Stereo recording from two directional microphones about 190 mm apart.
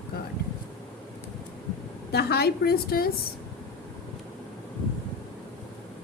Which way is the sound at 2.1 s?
55° left (ahead or behind).